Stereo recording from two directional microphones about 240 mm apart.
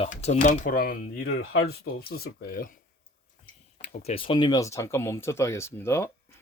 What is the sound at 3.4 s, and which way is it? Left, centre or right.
Speech, left.